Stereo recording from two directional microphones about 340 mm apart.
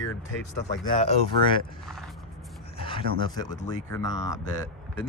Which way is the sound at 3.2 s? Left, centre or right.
Centre.